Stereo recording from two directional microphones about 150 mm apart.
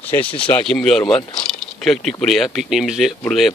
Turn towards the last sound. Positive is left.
turn(degrees=0)  # may be behind; listen again after turning